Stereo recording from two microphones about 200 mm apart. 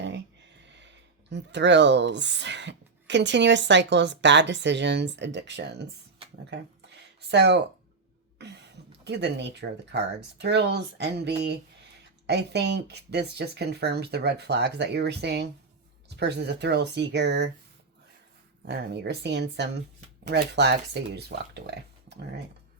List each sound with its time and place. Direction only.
0.7 s speech: 60° right (ahead or behind)
7.3 s speech: 60° right (ahead or behind)
18.6 s speech: 55° right (ahead or behind)